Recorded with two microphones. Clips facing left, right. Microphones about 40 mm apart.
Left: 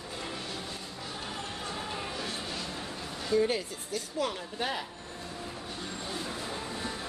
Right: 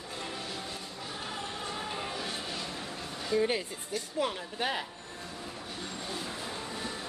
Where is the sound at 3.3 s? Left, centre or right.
Right.